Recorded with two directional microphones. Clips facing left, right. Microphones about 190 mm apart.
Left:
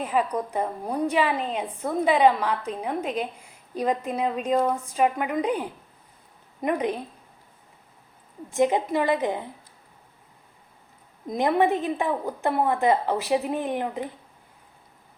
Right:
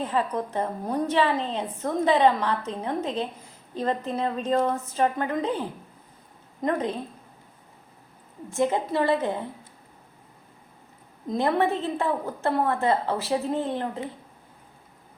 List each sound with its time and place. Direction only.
0.0 s a woman's voice: 15° left (ahead or behind)
8.4 s a woman's voice: 15° left (ahead or behind)
11.3 s a woman's voice: 15° left (ahead or behind)